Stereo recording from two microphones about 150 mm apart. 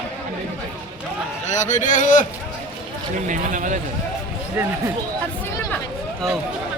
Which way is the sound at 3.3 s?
55° right (ahead or behind).